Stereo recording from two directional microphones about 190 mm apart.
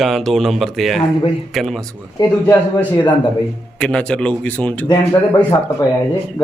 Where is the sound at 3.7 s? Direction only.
5° left (ahead or behind).